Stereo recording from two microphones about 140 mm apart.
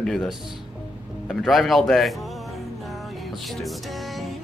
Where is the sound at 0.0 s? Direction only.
5° left (ahead or behind).